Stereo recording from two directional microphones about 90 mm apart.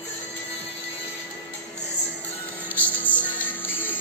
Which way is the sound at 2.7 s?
20° left (ahead or behind).